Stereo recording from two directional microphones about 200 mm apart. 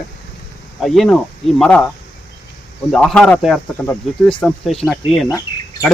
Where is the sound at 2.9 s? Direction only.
Centre (ahead or behind).